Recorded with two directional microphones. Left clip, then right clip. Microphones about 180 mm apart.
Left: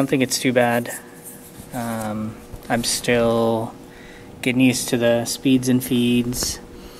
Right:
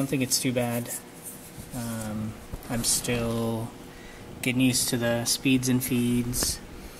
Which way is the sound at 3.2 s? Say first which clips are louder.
Left 12 dB; 20° left (ahead or behind).